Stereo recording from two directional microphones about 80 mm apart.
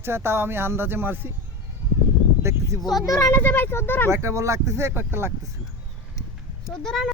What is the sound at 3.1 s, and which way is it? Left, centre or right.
Speech, left.